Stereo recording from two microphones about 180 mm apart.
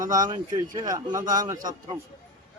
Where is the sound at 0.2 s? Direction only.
20° right (ahead or behind).